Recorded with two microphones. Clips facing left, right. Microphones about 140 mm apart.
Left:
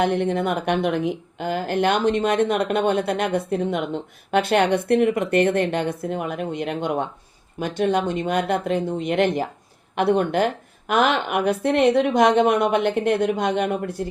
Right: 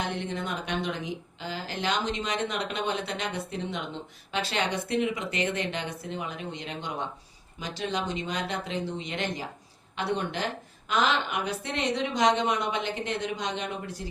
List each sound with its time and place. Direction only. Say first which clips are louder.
0.0 s a woman's voice: left 11 dB; 55° left (ahead or behind)